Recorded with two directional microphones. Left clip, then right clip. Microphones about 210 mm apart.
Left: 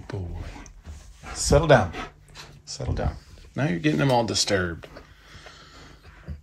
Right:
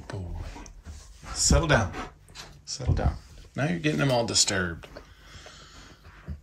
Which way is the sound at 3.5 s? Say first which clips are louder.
Left 3 dB; 10° right (ahead or behind).